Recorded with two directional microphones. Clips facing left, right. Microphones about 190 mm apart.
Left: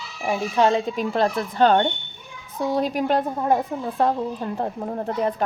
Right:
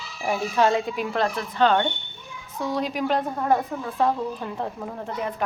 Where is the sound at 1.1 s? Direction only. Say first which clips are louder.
Left 4 dB; 40° left (ahead or behind).